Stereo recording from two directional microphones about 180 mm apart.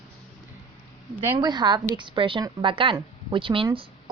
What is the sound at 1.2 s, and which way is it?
A woman's voice, 25° right (ahead or behind).